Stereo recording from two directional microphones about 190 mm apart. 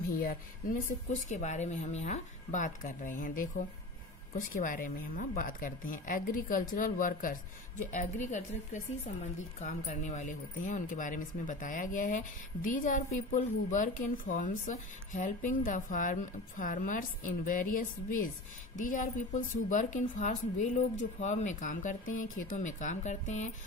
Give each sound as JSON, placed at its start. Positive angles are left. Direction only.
{"t": 0.1, "sound": "speech", "side_deg": 45}